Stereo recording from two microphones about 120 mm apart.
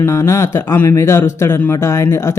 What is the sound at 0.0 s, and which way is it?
Speech, 20° left (ahead or behind).